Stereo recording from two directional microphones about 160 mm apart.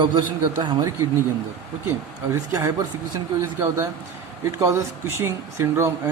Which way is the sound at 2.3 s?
20° right (ahead or behind).